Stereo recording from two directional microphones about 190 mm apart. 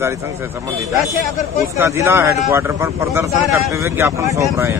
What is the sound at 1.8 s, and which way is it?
Speech, 15° right (ahead or behind).